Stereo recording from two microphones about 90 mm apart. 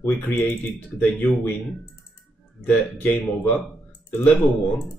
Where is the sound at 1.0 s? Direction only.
15° left (ahead or behind).